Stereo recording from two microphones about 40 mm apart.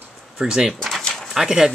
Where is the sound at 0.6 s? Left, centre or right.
Centre.